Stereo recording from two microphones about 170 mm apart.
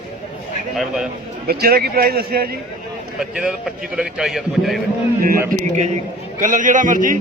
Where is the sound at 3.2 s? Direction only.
5° right (ahead or behind).